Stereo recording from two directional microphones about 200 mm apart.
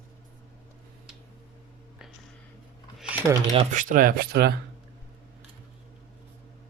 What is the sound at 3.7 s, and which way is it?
Speech, 40° right (ahead or behind).